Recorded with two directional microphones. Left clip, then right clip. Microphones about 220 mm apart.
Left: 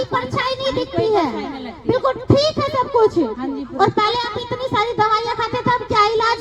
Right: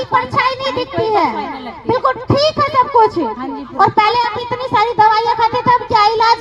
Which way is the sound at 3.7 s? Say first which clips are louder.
Right 5 dB; 25° right (ahead or behind).